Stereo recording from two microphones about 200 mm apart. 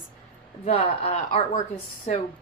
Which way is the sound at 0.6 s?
30° left (ahead or behind).